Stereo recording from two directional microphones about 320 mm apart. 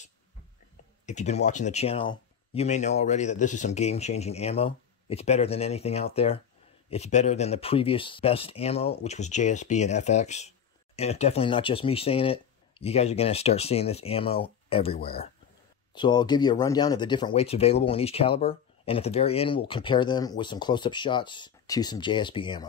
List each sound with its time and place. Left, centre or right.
1.0 s speech: left